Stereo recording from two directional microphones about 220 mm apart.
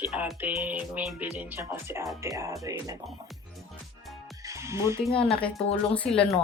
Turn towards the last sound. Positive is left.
turn(degrees=5)  # may be behind; listen again after turning